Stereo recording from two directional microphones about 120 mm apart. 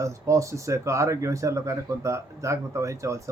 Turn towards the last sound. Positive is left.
turn(degrees=-25)  # may be behind; listen again after turning